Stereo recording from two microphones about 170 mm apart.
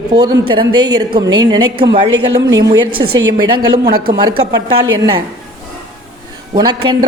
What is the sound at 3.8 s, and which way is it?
Speech, 60° right (ahead or behind).